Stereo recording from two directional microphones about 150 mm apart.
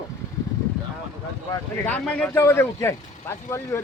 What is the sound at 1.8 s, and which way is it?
Speech, 10° left (ahead or behind).